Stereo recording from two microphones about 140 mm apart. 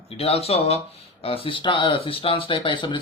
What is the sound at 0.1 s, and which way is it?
Speech, 45° left (ahead or behind).